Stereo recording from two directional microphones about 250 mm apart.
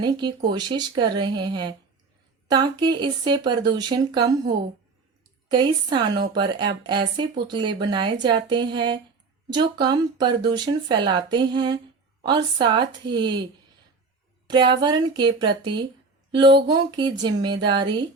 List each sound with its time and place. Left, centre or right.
0.0 s speech: centre
5.5 s a woman's voice: centre
14.7 s speech: centre